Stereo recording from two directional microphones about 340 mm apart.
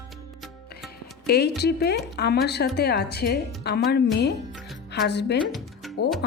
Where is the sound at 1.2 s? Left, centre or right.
Left.